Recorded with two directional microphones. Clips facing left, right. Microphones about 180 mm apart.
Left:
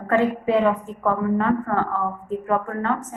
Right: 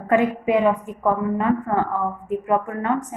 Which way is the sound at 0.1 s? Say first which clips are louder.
Right 1 dB; 15° right (ahead or behind).